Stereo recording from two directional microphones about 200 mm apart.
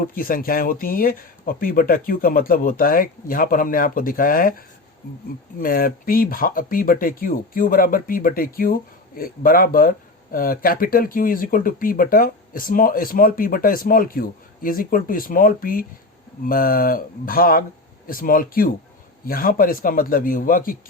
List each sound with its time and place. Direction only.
0.0 s speech: 45° left (ahead or behind)